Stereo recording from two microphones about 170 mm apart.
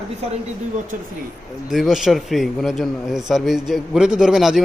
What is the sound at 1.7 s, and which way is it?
A man's voice, centre (ahead or behind).